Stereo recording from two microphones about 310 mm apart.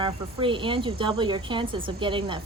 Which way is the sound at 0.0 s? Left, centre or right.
Centre.